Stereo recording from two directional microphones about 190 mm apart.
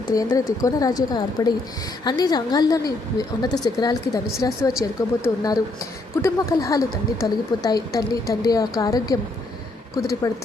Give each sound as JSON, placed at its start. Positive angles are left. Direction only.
{"t": 0.1, "sound": "a woman's voice", "side_deg": 15}